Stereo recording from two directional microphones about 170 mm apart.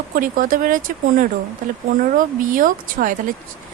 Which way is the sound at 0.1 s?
55° right (ahead or behind).